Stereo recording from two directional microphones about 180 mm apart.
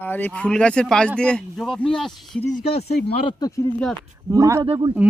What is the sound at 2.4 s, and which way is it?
Speech, 35° left (ahead or behind).